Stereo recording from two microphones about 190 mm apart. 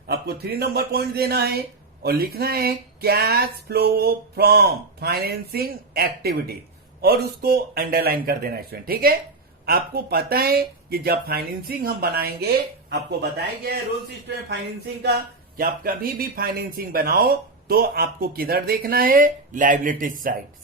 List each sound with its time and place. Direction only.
0.1 s speech: 55° right (ahead or behind)
15.0 s speech: 55° right (ahead or behind)